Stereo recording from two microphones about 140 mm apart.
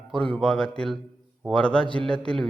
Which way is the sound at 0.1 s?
5° left (ahead or behind).